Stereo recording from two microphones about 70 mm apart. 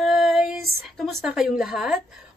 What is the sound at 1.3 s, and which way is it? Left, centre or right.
Speech, centre.